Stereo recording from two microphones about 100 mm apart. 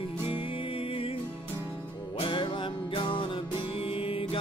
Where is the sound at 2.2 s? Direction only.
55° left (ahead or behind).